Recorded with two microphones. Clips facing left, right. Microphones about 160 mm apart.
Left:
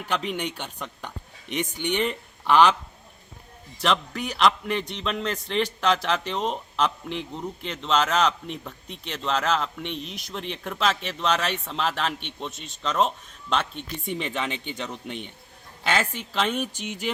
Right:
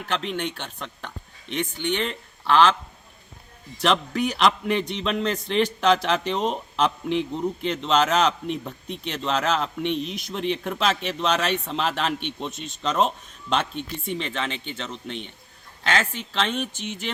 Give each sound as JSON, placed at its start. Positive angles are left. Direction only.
{"t": 0.0, "sound": "a man's voice", "side_deg": 10}
{"t": 3.8, "sound": "a man's voice", "side_deg": 0}
{"t": 10.0, "sound": "speech", "side_deg": 40}
{"t": 10.3, "sound": "a man's voice", "side_deg": 0}
{"t": 14.2, "sound": "a man's voice", "side_deg": 10}